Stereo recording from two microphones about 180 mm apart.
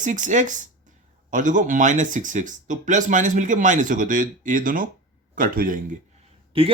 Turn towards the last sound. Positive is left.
turn(degrees=-30)  # may be behind; listen again after turning